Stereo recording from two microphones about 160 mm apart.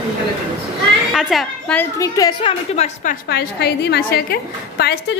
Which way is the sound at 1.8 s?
20° left (ahead or behind).